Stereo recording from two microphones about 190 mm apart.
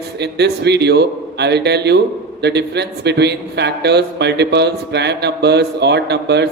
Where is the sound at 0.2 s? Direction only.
60° right (ahead or behind).